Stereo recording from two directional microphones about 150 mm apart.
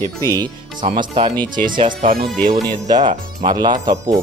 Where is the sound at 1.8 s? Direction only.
65° right (ahead or behind).